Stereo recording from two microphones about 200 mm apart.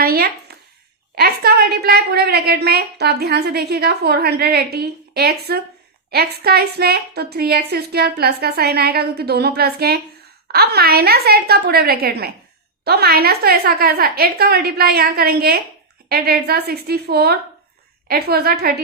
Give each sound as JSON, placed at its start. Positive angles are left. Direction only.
{"t": 0.0, "sound": "a woman's voice", "side_deg": -50}